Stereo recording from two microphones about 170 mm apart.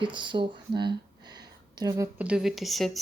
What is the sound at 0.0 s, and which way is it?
Speech, 25° right (ahead or behind).